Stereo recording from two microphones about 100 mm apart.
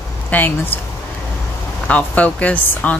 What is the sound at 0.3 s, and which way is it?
Speech, 15° left (ahead or behind).